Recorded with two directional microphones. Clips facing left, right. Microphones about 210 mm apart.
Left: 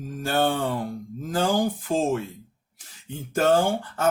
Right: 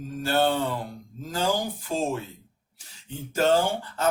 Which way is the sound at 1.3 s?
50° left (ahead or behind).